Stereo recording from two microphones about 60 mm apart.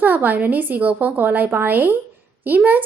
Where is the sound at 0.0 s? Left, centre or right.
Right.